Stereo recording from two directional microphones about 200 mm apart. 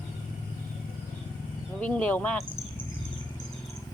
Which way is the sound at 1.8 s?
5° left (ahead or behind).